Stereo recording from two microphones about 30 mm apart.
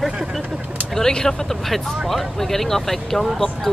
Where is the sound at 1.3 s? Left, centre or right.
Left.